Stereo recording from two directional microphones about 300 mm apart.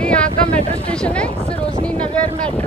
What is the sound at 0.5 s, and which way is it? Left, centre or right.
Speech, centre.